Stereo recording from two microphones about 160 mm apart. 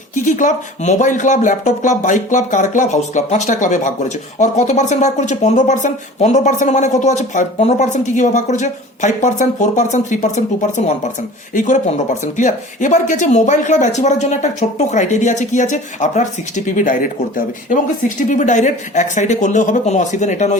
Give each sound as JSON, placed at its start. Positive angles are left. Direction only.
{"t": 0.3, "sound": "speech", "side_deg": 50}